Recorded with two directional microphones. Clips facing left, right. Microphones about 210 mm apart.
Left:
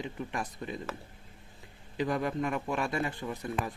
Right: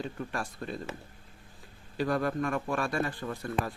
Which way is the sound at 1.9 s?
20° left (ahead or behind).